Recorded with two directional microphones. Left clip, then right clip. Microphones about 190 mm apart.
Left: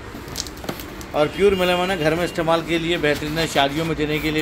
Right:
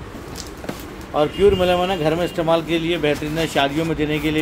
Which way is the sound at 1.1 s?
Centre (ahead or behind).